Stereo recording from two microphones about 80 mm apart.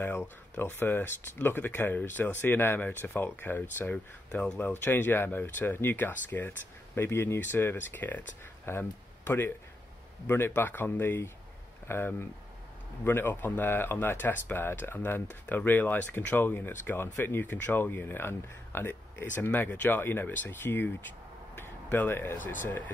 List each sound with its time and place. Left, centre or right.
0.0 s speech: left